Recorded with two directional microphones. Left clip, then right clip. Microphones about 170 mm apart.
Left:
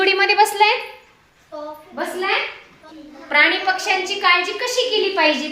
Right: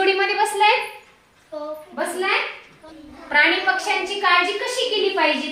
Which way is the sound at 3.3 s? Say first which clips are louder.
Left 2 dB; 40° left (ahead or behind).